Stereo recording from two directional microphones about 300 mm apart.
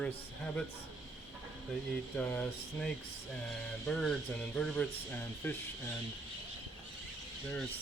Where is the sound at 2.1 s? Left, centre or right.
Centre.